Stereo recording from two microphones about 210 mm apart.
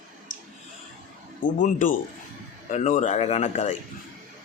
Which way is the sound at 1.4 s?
40° left (ahead or behind).